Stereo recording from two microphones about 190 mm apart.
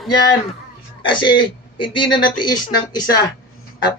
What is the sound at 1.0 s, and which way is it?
Speech, 25° left (ahead or behind).